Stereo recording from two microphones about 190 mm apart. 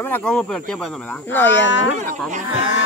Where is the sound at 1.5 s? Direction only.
70° left (ahead or behind).